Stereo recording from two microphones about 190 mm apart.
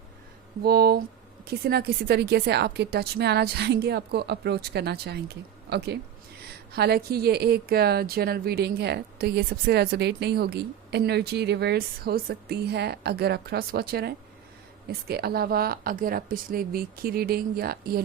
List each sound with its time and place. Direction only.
0.6 s a woman's voice: 55° right (ahead or behind)